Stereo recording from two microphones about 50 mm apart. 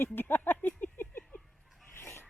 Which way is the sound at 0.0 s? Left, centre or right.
Left.